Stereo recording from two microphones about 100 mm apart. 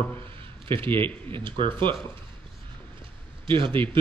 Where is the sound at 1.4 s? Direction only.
55° right (ahead or behind).